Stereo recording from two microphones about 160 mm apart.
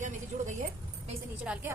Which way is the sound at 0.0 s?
50° right (ahead or behind).